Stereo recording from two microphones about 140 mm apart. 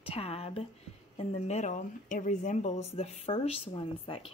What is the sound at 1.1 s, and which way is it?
Speech, 50° left (ahead or behind).